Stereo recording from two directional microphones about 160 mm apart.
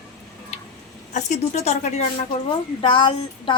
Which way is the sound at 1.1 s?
50° left (ahead or behind).